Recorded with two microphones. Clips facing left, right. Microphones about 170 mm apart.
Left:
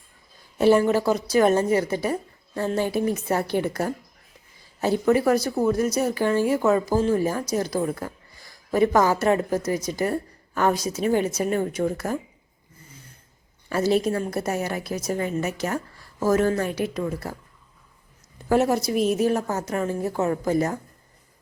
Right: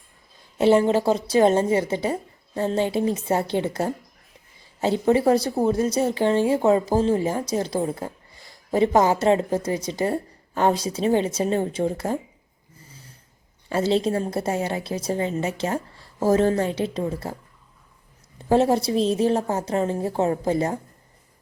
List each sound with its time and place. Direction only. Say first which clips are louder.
0.6 s speech: right 1 dB; 25° right (ahead or behind)
12.9 s a sound: even; 30° right (ahead or behind)
13.7 s speech: even; 25° right (ahead or behind)
18.3 s speech: right 2 dB; 25° right (ahead or behind)